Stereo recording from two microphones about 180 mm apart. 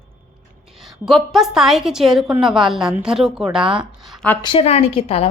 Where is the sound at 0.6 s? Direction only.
Centre (ahead or behind).